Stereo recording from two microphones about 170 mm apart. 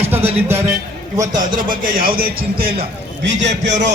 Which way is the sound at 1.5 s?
55° right (ahead or behind).